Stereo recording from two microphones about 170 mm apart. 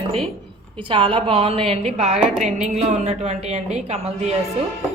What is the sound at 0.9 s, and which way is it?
A woman's voice, 30° right (ahead or behind).